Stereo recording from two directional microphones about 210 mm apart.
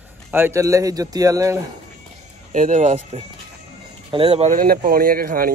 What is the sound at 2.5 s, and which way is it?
Speech, 35° right (ahead or behind).